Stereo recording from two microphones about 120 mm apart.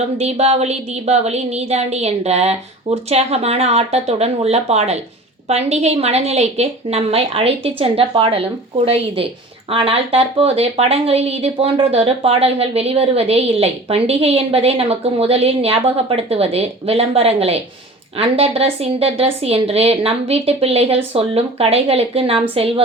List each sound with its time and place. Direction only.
0.2 s a woman's voice: 65° right (ahead or behind)